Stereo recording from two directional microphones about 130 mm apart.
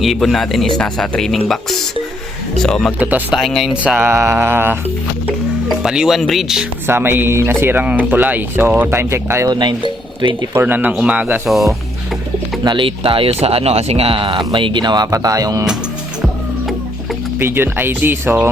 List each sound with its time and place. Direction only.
0.0 s speech: centre (ahead or behind)
2.6 s speech: 5° left (ahead or behind)
3.0 s speech: 15° right (ahead or behind)
3.3 s speech: centre (ahead or behind); by 4.8 s 15° right (ahead or behind)
5.6 s speech: 5° right (ahead or behind)
6.8 s speech: 15° right (ahead or behind)
9.5 s speech: 35° right (ahead or behind)
10.5 s speech: 15° right (ahead or behind)
12.6 s speech: 40° right (ahead or behind)
17.4 s speech: 15° right (ahead or behind)